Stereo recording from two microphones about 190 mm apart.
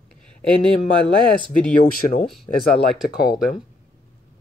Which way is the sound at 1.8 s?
45° left (ahead or behind).